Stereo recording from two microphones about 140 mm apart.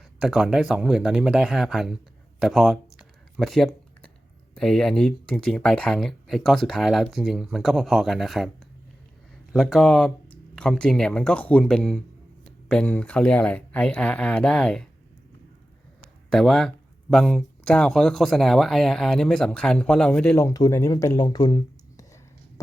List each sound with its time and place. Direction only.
0.2 s speech: 5° right (ahead or behind)
2.4 s a sound: centre (ahead or behind)
4.5 s speech: 5° left (ahead or behind)
9.5 s speech: centre (ahead or behind)
16.3 s speech: centre (ahead or behind)
20.3 s speech: 25° left (ahead or behind)